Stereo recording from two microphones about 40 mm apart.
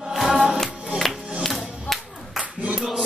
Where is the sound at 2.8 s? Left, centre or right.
Centre.